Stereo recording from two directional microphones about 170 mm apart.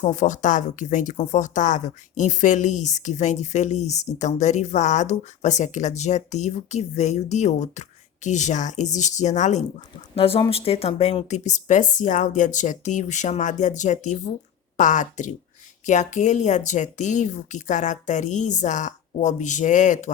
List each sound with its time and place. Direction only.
0.0 s speech: 45° left (ahead or behind)